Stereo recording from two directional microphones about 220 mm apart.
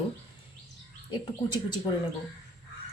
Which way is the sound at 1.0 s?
20° left (ahead or behind).